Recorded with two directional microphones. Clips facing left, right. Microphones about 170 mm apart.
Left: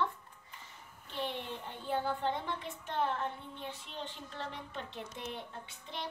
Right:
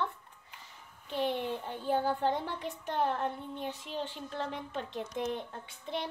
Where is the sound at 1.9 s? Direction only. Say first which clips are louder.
Right 4 dB; 40° right (ahead or behind).